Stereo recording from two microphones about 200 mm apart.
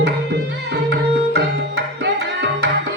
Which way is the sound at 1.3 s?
55° right (ahead or behind).